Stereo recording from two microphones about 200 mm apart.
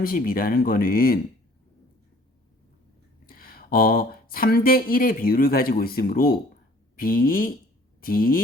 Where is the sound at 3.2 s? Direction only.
45° left (ahead or behind).